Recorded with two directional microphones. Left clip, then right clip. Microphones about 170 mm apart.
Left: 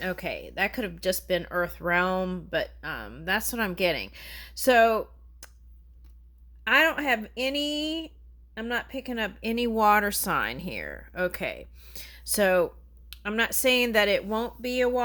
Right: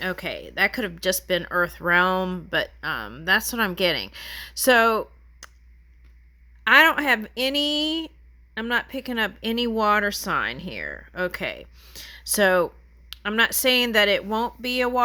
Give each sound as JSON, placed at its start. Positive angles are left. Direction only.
{"t": 0.0, "sound": "speech", "side_deg": -20}
{"t": 5.4, "sound": "a sound", "side_deg": -15}
{"t": 6.7, "sound": "speech", "side_deg": -30}